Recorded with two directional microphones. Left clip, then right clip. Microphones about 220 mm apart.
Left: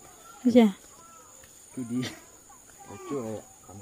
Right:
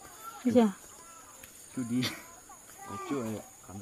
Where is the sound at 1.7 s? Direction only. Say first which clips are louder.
Right 1 dB; 45° right (ahead or behind).